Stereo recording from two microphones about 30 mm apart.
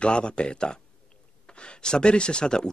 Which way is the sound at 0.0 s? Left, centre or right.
Left.